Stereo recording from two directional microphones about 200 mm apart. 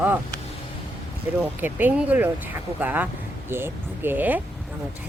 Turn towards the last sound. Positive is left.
turn(degrees=-10)  # may be behind; listen again after turning